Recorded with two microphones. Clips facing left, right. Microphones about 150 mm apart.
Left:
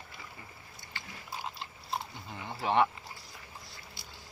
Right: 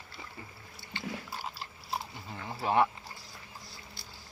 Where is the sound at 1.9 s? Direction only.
Centre (ahead or behind).